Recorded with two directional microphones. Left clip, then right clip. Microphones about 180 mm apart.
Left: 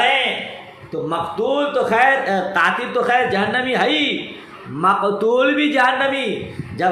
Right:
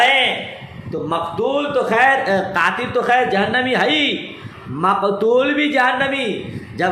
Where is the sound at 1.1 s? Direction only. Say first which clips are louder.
Right 1 dB; 10° right (ahead or behind).